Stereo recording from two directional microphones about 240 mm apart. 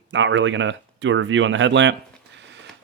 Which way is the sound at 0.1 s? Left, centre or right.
Right.